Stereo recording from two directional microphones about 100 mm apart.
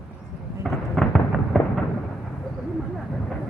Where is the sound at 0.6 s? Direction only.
Centre (ahead or behind).